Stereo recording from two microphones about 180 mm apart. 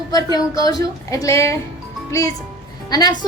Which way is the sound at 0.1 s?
20° left (ahead or behind).